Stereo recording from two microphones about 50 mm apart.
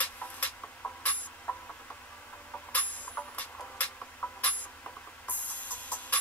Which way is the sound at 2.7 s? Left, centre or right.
Left.